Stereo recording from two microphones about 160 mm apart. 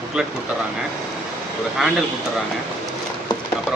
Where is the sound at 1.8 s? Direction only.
Centre (ahead or behind).